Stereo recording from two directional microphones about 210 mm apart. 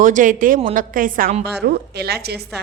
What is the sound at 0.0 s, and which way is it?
A woman's voice, 40° right (ahead or behind).